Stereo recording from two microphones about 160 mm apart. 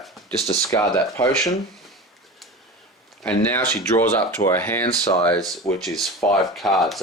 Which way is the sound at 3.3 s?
10° left (ahead or behind).